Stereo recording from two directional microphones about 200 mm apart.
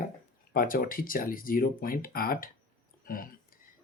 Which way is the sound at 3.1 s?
45° left (ahead or behind).